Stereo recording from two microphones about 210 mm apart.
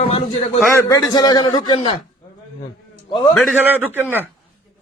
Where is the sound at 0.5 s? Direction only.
10° left (ahead or behind).